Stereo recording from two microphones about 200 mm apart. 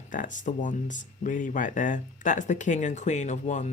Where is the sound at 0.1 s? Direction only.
40° left (ahead or behind).